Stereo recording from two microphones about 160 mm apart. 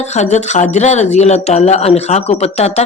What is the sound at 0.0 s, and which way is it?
Speech, 45° left (ahead or behind).